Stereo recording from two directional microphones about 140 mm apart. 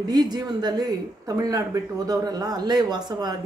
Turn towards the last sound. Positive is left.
turn(degrees=-30)  # may be behind; listen again after turning